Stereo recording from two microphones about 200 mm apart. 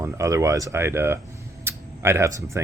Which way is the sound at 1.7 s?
15° right (ahead or behind).